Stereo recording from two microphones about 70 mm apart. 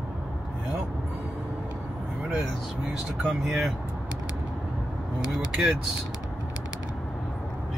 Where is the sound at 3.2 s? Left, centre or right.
Centre.